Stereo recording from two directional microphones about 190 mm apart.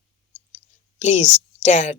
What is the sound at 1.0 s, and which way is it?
Speech, 35° left (ahead or behind).